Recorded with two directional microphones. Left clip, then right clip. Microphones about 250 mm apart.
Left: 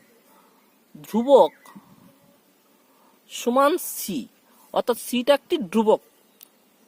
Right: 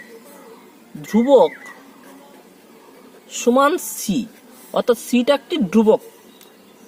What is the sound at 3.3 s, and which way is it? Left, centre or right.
Speech, left.